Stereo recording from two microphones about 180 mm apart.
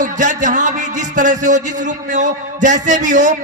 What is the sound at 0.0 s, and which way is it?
A man's voice, 45° right (ahead or behind).